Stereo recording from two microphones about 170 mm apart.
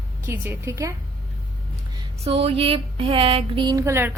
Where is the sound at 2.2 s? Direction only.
35° right (ahead or behind).